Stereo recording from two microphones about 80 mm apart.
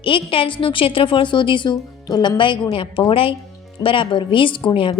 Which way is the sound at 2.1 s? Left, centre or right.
Left.